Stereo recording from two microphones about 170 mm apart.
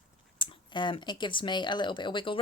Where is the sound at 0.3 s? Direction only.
25° left (ahead or behind).